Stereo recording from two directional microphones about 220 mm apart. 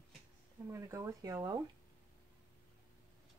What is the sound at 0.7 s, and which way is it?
Speech, 15° right (ahead or behind).